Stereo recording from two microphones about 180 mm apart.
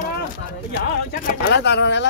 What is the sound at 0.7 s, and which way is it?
Speech, 70° left (ahead or behind).